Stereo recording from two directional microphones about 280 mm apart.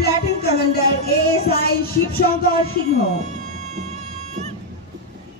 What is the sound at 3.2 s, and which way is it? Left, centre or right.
Music, right.